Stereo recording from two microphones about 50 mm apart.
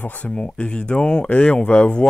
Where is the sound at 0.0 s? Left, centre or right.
Left.